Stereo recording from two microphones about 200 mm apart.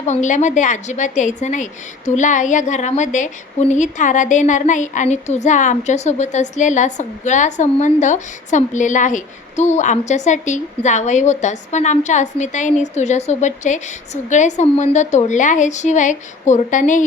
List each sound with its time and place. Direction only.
0.0 s a woman's voice: 35° left (ahead or behind)